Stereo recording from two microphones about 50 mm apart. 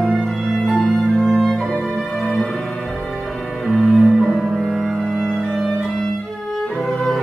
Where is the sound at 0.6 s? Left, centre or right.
Centre.